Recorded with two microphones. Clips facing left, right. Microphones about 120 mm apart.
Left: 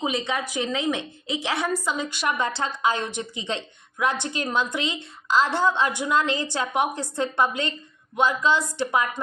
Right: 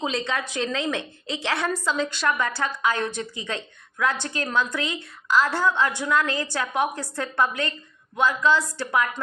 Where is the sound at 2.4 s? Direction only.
25° left (ahead or behind).